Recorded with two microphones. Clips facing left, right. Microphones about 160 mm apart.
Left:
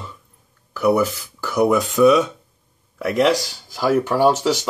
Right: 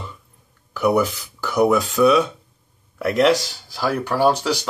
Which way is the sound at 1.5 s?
5° right (ahead or behind).